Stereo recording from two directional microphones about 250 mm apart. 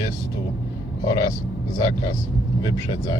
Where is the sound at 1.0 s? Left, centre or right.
Centre.